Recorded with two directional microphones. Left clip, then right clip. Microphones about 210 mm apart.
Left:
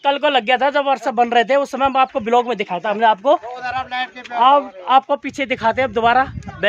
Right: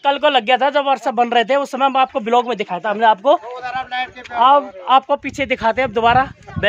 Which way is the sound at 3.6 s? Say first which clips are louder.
Even; 25° left (ahead or behind).